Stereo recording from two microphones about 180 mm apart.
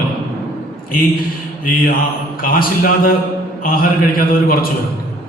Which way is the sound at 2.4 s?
50° left (ahead or behind).